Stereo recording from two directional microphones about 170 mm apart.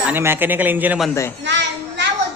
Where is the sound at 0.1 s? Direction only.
15° right (ahead or behind).